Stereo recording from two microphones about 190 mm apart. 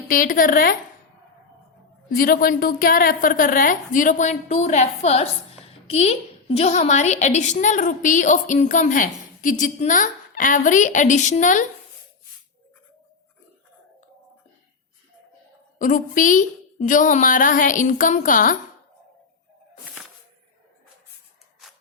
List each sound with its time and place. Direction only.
0.1 s a woman's voice: 45° left (ahead or behind)
2.0 s a woman's voice: 50° left (ahead or behind)
15.8 s a woman's voice: 45° left (ahead or behind)